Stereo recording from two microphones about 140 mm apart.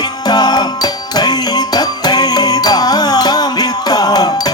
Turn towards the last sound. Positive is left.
turn(degrees=30)  # may be behind; listen again after turning